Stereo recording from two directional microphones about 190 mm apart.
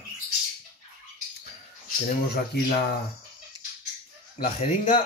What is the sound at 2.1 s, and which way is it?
Speech, 50° left (ahead or behind).